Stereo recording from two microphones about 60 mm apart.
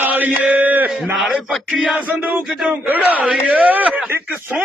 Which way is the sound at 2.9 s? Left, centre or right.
Right.